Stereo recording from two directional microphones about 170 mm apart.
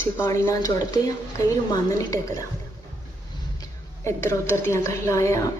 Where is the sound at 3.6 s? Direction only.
15° left (ahead or behind).